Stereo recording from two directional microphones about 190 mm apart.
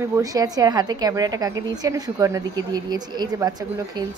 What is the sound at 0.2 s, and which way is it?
A woman's voice, 20° right (ahead or behind).